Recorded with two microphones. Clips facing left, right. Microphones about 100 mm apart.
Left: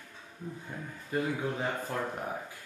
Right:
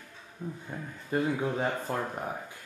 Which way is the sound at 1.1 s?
35° right (ahead or behind).